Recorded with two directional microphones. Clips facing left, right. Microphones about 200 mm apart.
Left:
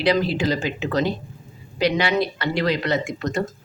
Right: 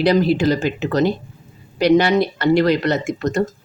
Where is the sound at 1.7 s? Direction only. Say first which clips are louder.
Right 6 dB; 45° right (ahead or behind).